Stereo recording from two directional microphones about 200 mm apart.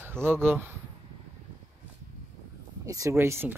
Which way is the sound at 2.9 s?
15° right (ahead or behind).